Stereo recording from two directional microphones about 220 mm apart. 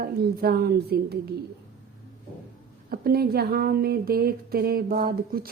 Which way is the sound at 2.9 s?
45° right (ahead or behind).